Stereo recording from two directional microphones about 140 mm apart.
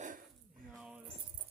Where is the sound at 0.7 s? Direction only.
5° right (ahead or behind).